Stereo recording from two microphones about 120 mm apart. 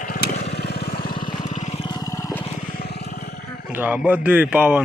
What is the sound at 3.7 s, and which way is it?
A man's voice, 15° right (ahead or behind).